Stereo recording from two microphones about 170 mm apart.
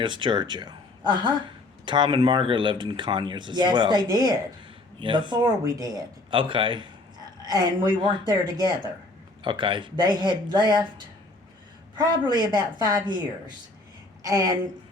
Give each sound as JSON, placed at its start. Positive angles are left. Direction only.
{"t": 0.0, "sound": "speech", "side_deg": -30}
{"t": 14.2, "sound": "a woman's voice", "side_deg": -20}